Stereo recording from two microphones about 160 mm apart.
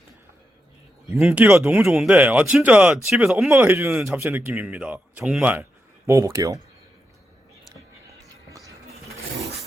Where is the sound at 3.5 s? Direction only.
15° right (ahead or behind).